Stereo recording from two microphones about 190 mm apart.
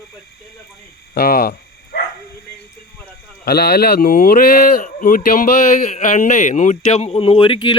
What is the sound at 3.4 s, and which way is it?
Speech, 55° left (ahead or behind).